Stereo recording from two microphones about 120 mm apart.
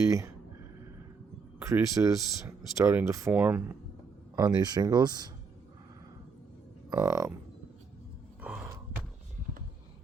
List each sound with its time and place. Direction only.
0.0 s speech: 25° right (ahead or behind)
1.6 s speech: 25° right (ahead or behind)
4.4 s speech: 35° right (ahead or behind)
6.9 s speech: 25° right (ahead or behind)
8.4 s gasp: 5° right (ahead or behind)